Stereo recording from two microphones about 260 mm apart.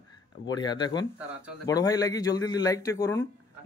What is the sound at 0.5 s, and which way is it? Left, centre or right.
A man's voice, centre.